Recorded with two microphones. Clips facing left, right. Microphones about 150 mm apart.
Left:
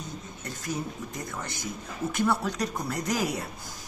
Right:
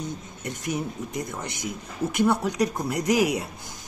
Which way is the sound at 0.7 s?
20° right (ahead or behind).